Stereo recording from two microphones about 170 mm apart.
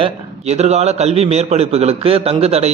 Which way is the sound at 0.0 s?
40° right (ahead or behind).